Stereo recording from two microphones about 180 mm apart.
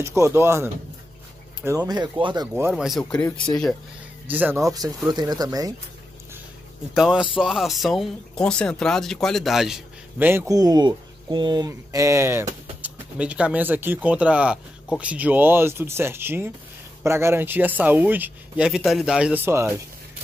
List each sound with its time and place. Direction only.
0.0 s speech: 15° right (ahead or behind)
2.7 s speech: centre (ahead or behind)
4.3 s speech: 10° right (ahead or behind)
4.6 s speech: 20° right (ahead or behind)
6.9 s speech: 5° right (ahead or behind)
10.5 s speech: 20° right (ahead or behind)